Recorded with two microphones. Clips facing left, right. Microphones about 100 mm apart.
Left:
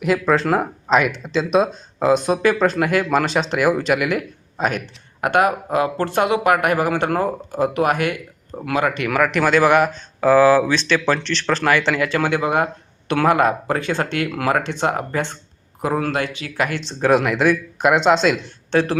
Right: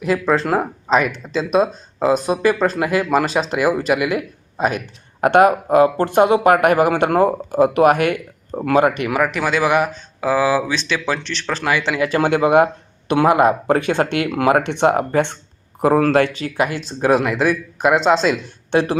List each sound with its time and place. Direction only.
0.0 s speech: centre (ahead or behind)
5.2 s speech: 35° right (ahead or behind)
6.0 s speech: 20° right (ahead or behind); by 6.7 s 40° right (ahead or behind)
6.7 s speech: 15° right (ahead or behind)
8.5 s speech: 30° right (ahead or behind)
9.0 s speech: 15° right (ahead or behind)
15.8 s speech: 35° right (ahead or behind)
16.6 s speech: 10° right (ahead or behind)
18.7 s speech: 15° right (ahead or behind)